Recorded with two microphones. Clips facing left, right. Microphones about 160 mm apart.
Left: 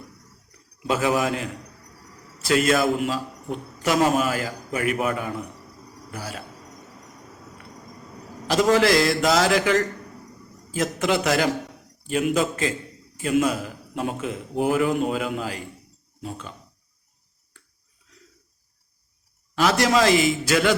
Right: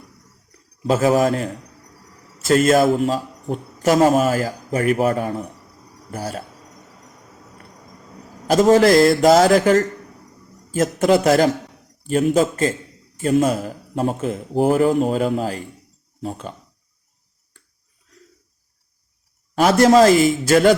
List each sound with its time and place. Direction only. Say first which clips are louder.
0.8 s a man's voice: right 6 dB; 40° right (ahead or behind)
2.5 s a man's voice: right 6 dB; 40° right (ahead or behind)
8.6 s a man's voice: right 6 dB; 40° right (ahead or behind)
19.5 s speech: right 7 dB; 50° right (ahead or behind)